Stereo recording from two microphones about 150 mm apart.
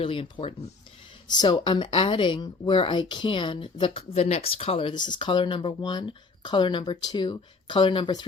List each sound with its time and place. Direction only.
0.0 s a woman's voice: 40° left (ahead or behind)